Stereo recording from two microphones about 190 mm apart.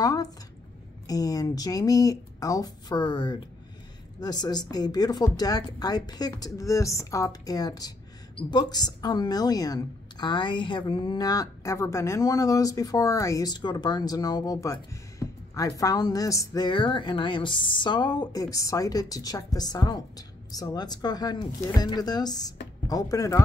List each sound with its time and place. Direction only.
0.0 s speech: 20° left (ahead or behind)